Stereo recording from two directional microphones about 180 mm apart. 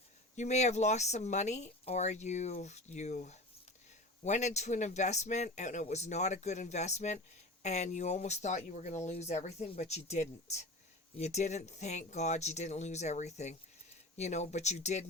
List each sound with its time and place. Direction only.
0.3 s speech: 40° left (ahead or behind)